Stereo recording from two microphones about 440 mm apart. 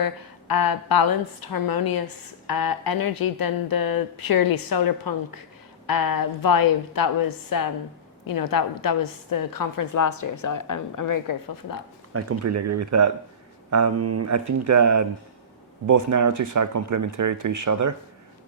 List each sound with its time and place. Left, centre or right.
0.0 s a woman's voice: left
12.1 s speech: right